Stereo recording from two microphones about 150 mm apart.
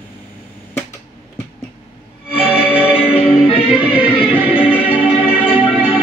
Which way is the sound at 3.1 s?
40° left (ahead or behind).